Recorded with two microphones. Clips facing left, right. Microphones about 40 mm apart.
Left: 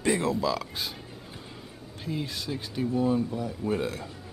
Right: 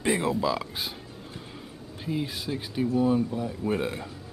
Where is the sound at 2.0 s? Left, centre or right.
Centre.